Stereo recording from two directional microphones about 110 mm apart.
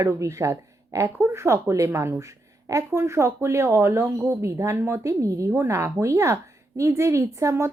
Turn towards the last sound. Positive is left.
turn(degrees=-25)  # may be behind; listen again after turning